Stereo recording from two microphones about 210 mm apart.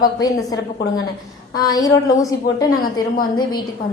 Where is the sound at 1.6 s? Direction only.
20° left (ahead or behind).